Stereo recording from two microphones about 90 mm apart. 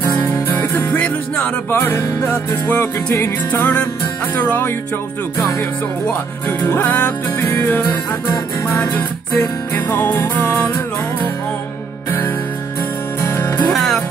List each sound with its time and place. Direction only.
0.6 s music: 20° left (ahead or behind)
6.6 s music: 20° left (ahead or behind)
9.8 s music: 25° left (ahead or behind)
13.2 s music: 35° left (ahead or behind)
13.7 s music: 5° left (ahead or behind)